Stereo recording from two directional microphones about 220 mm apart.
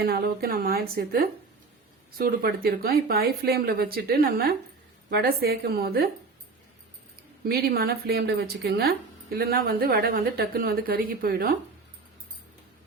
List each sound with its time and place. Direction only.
0.0 s speech: 45° right (ahead or behind)
7.4 s speech: 45° right (ahead or behind)